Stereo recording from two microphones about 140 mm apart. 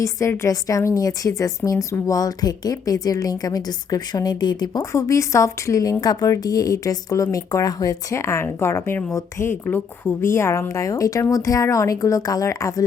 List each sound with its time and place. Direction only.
0.0 s a woman's voice: 20° left (ahead or behind)